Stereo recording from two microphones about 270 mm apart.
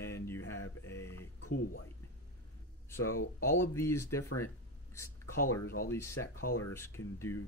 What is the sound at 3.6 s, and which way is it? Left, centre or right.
Speech, centre.